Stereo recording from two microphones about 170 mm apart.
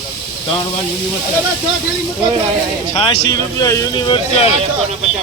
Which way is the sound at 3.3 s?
20° left (ahead or behind).